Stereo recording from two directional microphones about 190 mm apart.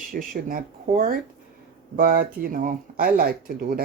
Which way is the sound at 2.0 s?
45° right (ahead or behind).